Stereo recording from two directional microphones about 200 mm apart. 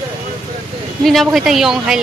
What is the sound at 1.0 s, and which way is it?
Speech, centre (ahead or behind).